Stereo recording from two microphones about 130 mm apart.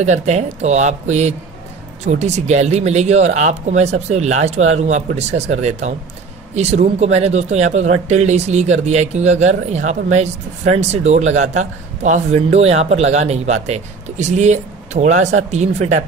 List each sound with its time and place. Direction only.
0.0 s speech: 60° right (ahead or behind)
12.4 s speech: 55° right (ahead or behind)